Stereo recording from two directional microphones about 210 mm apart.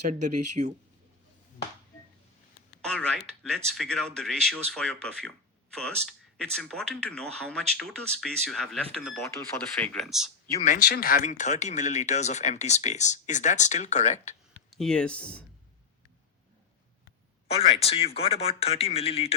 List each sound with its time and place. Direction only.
0.0 s speech: 35° right (ahead or behind)
2.8 s a sound: 5° left (ahead or behind)
3.8 s speech: 5° left (ahead or behind)
10.6 s speech: 40° left (ahead or behind)
14.7 s speech: centre (ahead or behind)
17.5 s a man's voice: 30° left (ahead or behind)